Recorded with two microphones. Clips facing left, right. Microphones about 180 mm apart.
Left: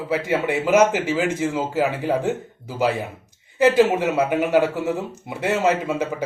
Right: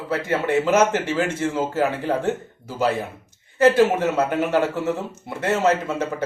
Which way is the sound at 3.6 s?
15° left (ahead or behind).